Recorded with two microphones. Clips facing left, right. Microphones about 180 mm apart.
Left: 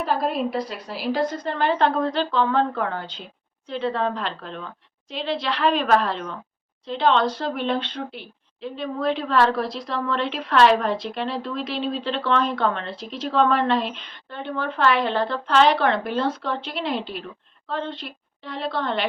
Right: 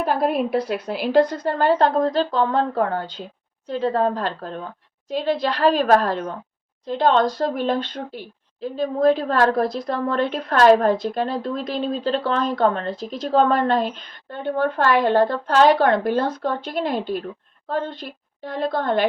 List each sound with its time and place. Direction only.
0.0 s a woman's voice: 55° right (ahead or behind)